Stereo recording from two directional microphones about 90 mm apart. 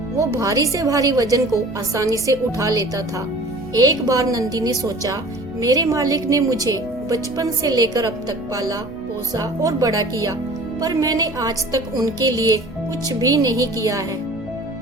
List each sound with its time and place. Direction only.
0.2 s a woman's voice: 35° right (ahead or behind)